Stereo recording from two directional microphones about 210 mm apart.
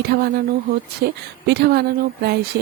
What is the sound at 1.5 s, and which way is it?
Speech, 50° right (ahead or behind).